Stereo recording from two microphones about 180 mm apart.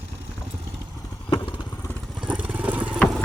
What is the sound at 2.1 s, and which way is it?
Vehicle, 5° right (ahead or behind).